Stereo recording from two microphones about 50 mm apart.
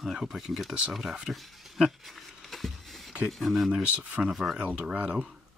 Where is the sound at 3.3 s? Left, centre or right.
Centre.